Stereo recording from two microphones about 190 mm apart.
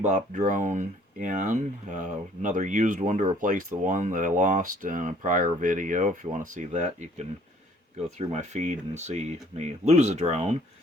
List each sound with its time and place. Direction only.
0.0 s speech: 40° right (ahead or behind)